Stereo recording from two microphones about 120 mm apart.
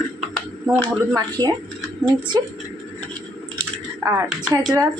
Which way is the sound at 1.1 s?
35° right (ahead or behind).